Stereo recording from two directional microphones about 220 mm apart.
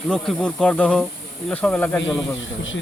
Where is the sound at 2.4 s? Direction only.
60° left (ahead or behind).